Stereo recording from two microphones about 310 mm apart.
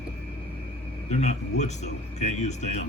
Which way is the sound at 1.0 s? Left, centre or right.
Left.